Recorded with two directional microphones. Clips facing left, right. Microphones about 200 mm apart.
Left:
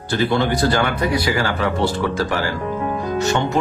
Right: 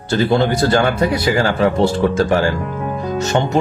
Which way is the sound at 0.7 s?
25° right (ahead or behind).